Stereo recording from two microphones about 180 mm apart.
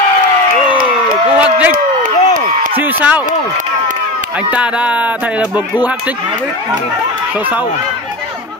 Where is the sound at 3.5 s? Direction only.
45° right (ahead or behind).